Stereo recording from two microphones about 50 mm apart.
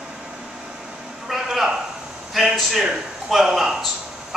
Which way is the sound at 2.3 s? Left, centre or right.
Centre.